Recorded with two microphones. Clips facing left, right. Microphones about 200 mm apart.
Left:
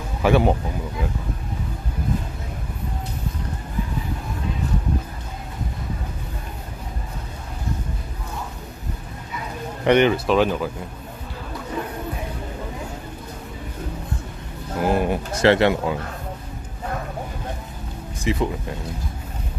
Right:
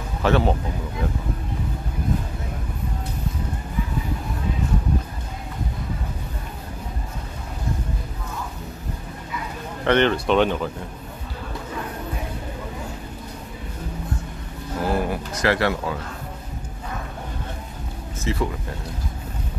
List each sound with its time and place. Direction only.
0.2 s speech: 15° left (ahead or behind)
9.8 s speech: 10° left (ahead or behind)
14.8 s speech: 20° left (ahead or behind)
18.2 s speech: 15° left (ahead or behind)